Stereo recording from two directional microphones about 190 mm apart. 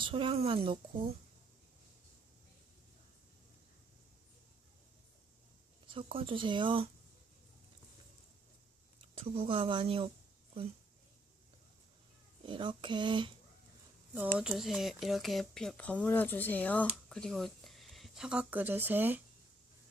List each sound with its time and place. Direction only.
0.0 s a woman's voice: 25° right (ahead or behind)
5.9 s a woman's voice: 30° right (ahead or behind)
9.0 s speech: 30° right (ahead or behind)
12.5 s a woman's voice: 25° right (ahead or behind)
14.1 s speech: 5° right (ahead or behind)